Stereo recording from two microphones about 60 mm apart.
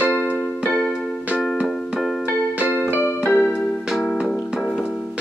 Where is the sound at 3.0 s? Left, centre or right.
Left.